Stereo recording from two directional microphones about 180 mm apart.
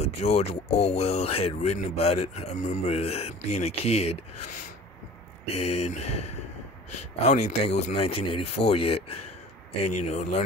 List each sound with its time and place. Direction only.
0.0 s speech: 35° left (ahead or behind)
5.5 s speech: 35° left (ahead or behind)